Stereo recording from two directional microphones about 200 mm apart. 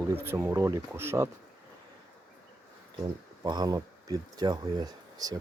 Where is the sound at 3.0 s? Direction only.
20° right (ahead or behind).